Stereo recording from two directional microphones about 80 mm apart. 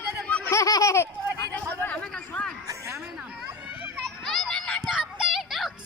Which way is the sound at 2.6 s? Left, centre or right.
Right.